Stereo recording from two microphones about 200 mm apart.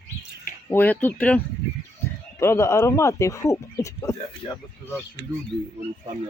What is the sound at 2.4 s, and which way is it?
Speech, 15° left (ahead or behind).